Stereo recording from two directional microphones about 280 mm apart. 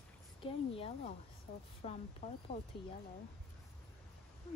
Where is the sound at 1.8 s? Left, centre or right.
Left.